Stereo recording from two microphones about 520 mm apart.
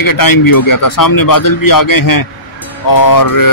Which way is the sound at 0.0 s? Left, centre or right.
Left.